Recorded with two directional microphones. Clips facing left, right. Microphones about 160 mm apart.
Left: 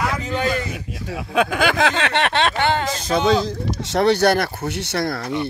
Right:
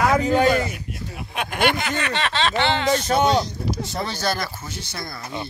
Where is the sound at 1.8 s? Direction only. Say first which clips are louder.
Left 5 dB; 90° left; by 2.9 s 50° left (ahead or behind).